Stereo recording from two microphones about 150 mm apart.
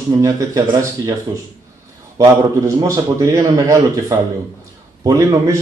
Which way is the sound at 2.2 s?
25° right (ahead or behind).